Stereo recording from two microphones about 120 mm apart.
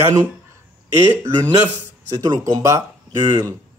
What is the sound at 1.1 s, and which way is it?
Speech, 25° right (ahead or behind).